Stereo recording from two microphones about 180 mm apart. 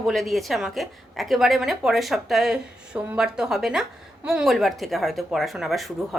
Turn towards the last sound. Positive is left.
turn(degrees=0)  # may be behind; listen again after turning